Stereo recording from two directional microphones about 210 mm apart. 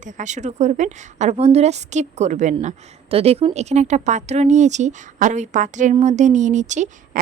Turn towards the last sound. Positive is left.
turn(degrees=-35)  # may be behind; listen again after turning